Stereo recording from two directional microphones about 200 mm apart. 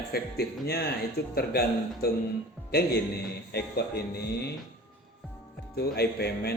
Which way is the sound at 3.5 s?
55° left (ahead or behind).